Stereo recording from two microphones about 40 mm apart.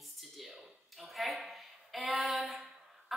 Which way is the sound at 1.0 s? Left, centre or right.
Centre.